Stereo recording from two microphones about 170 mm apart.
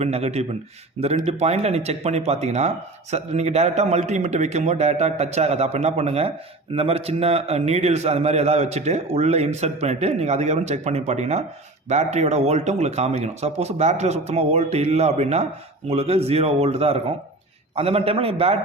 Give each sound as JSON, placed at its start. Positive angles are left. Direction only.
{"t": 0.0, "sound": "speech", "side_deg": -40}